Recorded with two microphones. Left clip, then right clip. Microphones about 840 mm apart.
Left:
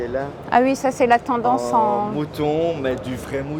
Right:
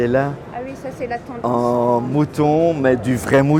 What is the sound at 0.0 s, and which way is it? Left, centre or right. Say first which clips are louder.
Speech: right 7 dB; right.